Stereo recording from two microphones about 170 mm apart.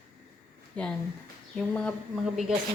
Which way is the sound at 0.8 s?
5° left (ahead or behind).